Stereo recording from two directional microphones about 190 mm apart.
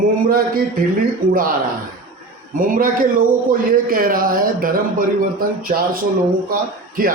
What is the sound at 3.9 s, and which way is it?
Speech, 50° right (ahead or behind).